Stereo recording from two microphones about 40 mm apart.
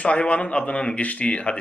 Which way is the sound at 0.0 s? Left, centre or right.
Left.